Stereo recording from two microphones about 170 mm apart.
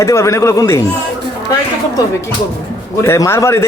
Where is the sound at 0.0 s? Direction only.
15° left (ahead or behind).